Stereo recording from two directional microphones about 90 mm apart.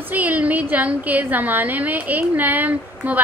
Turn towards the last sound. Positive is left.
turn(degrees=-20)  # may be behind; listen again after turning